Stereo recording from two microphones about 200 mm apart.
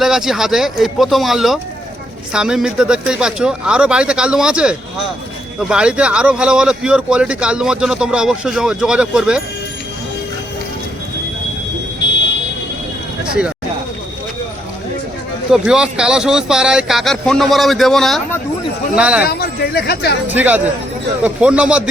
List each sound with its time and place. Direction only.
0.0 s speech: centre (ahead or behind)
15.4 s speech: 5° right (ahead or behind)
19.3 s speech: 50° left (ahead or behind)
20.2 s speech: 10° right (ahead or behind)